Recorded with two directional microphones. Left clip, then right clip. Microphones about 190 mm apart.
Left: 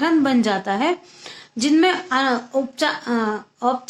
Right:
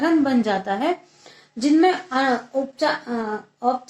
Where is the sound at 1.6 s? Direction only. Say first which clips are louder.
Even; 35° left (ahead or behind).